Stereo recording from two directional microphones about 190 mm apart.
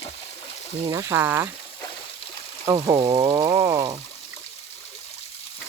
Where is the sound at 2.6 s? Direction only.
20° right (ahead or behind).